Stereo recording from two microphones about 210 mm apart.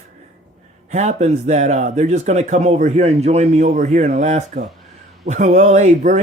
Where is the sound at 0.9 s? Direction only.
35° right (ahead or behind).